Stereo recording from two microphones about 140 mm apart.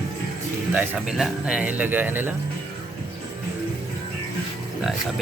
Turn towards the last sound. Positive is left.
turn(degrees=-5)  # may be behind; listen again after turning